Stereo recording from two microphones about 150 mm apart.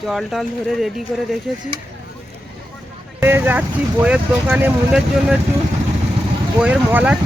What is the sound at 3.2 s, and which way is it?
Speech, 15° right (ahead or behind).